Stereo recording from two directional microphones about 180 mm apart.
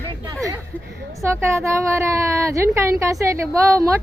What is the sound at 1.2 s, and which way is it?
A woman's voice, 15° right (ahead or behind).